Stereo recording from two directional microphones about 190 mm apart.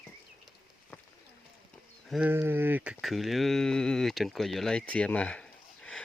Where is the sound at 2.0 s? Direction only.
Centre (ahead or behind).